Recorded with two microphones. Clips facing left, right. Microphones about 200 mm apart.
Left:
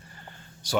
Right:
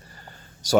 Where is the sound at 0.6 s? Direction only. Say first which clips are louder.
Right 7 dB; 45° right (ahead or behind).